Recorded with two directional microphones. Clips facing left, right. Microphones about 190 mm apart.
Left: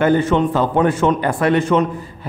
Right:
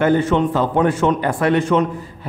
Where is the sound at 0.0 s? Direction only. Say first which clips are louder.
Left 1 dB; 45° left (ahead or behind).